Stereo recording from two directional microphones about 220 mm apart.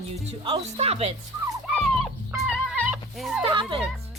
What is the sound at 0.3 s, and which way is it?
Speech, 25° right (ahead or behind).